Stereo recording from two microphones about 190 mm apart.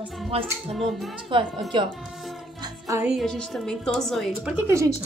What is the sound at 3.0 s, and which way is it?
Speech, centre (ahead or behind).